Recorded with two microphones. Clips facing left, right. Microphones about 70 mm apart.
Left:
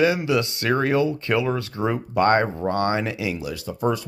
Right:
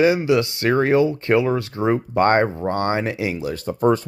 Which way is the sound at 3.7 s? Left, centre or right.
Right.